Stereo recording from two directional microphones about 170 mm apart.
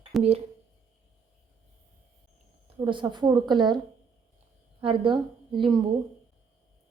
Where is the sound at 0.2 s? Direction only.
35° right (ahead or behind).